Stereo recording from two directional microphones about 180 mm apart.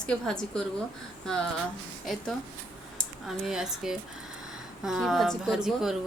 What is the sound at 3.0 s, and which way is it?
A woman's voice, centre (ahead or behind).